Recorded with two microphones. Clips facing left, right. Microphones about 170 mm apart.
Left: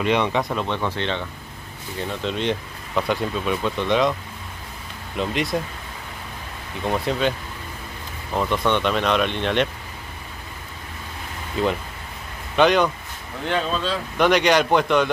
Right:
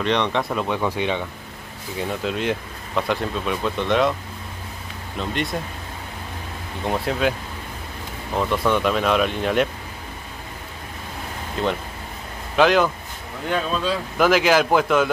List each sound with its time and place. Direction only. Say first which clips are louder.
0.0 s speech: left 1 dB; 10° left (ahead or behind)
5.2 s speech: left 2 dB; centre (ahead or behind)
6.8 s speech: even; centre (ahead or behind)
8.4 s speech: right 1 dB; centre (ahead or behind)
12.5 s speech: even; centre (ahead or behind)